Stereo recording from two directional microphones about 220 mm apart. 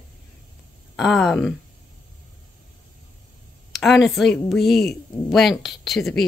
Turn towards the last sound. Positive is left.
turn(degrees=0)  # may be behind; listen again after turning